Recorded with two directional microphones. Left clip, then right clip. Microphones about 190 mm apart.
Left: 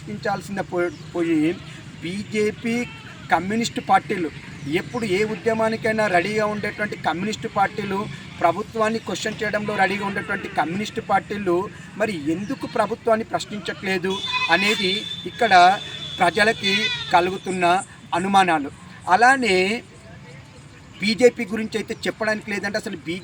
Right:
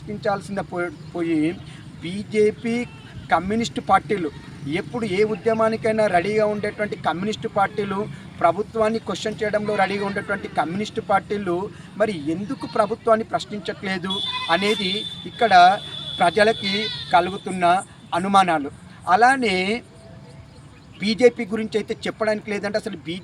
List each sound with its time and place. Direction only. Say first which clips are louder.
0.2 s speech: right 1 dB; 5° right (ahead or behind)
16.6 s speech: left 3 dB; 25° left (ahead or behind)
17.1 s speech: right 1 dB; 5° right (ahead or behind)
21.0 s speech: even; 5° right (ahead or behind)